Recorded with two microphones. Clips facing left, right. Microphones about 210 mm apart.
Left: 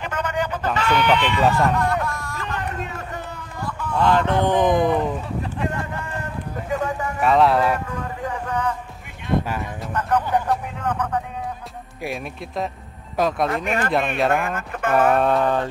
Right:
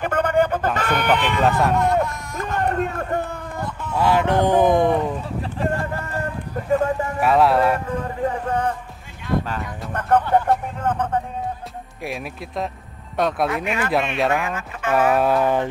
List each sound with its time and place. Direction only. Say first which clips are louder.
0.0 s a sound: right 6 dB; 55° right (ahead or behind)
0.7 s speech: left 5 dB; 50° right (ahead or behind)
1.4 s speech: right 1 dB; centre (ahead or behind)
1.8 s music: right 3 dB; 20° right (ahead or behind)
2.5 s a sound: right 9 dB; 55° right (ahead or behind)
3.9 s speech: right 1 dB; 10° right (ahead or behind)
7.2 s speech: even; centre (ahead or behind)
7.9 s music: right 5 dB; 30° right (ahead or behind)
9.9 s a sound: right 3 dB; 55° right (ahead or behind)
12.0 s speech: left 1 dB; centre (ahead or behind)
13.7 s speech: left 1 dB; 50° left (ahead or behind)
13.9 s speech: even; centre (ahead or behind)
14.4 s speech: left 2 dB; 55° left (ahead or behind)
14.9 s speech: even; centre (ahead or behind)